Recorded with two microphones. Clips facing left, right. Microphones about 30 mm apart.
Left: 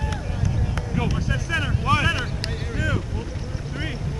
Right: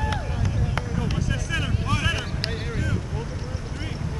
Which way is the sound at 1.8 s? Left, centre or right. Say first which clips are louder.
Left 9 dB; centre.